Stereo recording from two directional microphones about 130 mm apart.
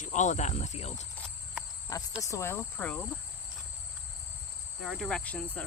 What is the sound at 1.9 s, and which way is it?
Speech, 25° left (ahead or behind).